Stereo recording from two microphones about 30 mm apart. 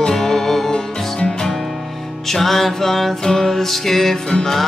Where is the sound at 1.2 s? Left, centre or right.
Left.